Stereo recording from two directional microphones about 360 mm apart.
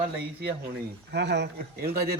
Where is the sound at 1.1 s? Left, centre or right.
Right.